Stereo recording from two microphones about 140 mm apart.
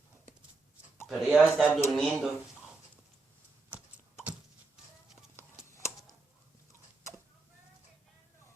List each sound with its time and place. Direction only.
1.0 s speech: centre (ahead or behind)
3.7 s typing: 10° right (ahead or behind)
5.6 s a sound: 20° left (ahead or behind)